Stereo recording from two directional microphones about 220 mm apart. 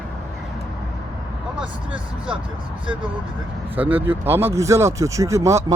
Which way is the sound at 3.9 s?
10° right (ahead or behind).